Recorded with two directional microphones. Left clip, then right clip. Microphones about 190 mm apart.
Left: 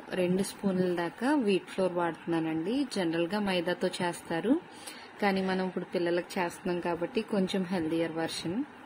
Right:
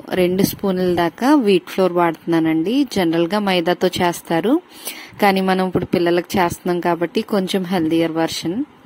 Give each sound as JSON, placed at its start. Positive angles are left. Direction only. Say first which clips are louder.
{"t": 0.1, "sound": "a woman's voice", "louder": "right 13 dB", "side_deg": -50}